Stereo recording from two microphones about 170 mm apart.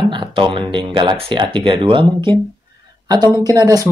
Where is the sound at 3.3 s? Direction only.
20° right (ahead or behind).